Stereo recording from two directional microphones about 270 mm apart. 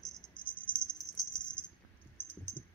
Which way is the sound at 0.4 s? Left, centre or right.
Centre.